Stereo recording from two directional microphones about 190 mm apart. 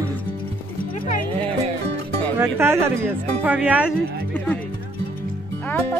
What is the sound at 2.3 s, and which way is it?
Speech, 15° right (ahead or behind).